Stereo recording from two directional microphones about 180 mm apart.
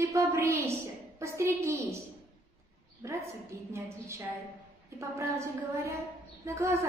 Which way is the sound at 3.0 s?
15° right (ahead or behind).